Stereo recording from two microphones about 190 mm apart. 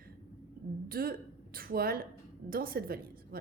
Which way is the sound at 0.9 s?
50° right (ahead or behind).